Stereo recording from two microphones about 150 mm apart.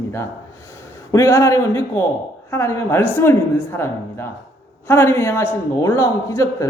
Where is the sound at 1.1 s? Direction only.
20° left (ahead or behind).